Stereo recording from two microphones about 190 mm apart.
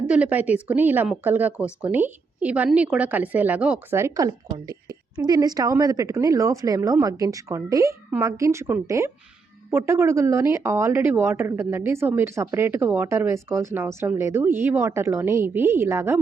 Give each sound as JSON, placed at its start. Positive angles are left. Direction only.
{"t": 0.1, "sound": "speech", "side_deg": -10}